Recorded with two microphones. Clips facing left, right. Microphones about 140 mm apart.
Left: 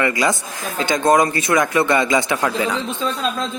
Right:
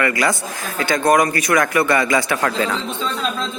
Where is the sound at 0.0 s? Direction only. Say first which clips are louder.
Even; 20° left (ahead or behind).